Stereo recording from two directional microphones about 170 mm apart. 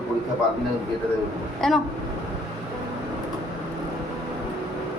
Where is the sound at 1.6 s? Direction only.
5° left (ahead or behind).